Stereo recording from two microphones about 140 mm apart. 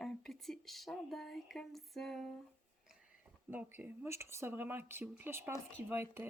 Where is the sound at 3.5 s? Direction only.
15° right (ahead or behind).